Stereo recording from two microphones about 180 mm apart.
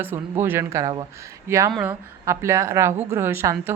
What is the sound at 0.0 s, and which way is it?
A woman's voice, 10° right (ahead or behind).